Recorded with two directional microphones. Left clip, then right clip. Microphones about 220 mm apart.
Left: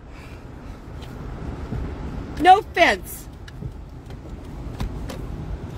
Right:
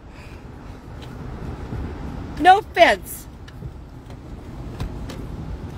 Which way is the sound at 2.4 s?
20° right (ahead or behind).